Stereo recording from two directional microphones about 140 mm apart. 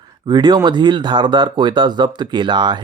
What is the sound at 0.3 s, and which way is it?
Speech, 35° right (ahead or behind).